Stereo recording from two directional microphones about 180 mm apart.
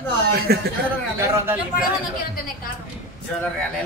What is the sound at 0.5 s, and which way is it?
Speech, 60° right (ahead or behind).